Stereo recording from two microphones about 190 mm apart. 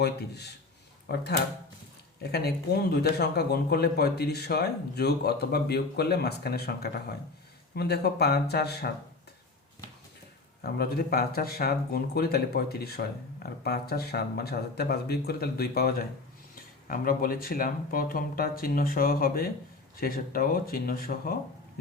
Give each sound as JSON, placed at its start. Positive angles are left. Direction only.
{"t": 0.0, "sound": "speech", "side_deg": 60}
{"t": 10.6, "sound": "speech", "side_deg": 55}